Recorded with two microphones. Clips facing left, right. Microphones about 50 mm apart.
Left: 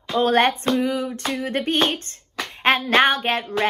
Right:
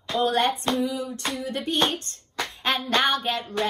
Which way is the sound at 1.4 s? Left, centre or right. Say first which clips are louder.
Left 7 dB; left.